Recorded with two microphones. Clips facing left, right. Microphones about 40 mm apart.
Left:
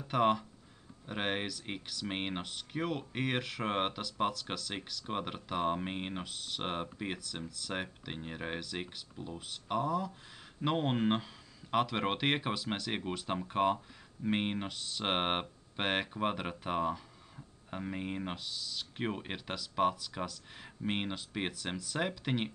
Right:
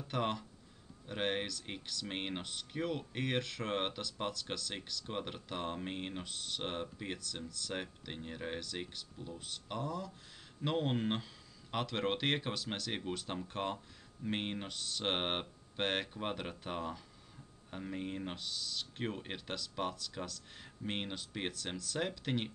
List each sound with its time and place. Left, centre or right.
0.1 s speech: centre
6.6 s speech: centre
18.3 s speech: centre